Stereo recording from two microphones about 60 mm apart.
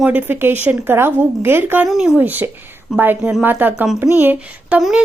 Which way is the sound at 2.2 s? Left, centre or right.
Right.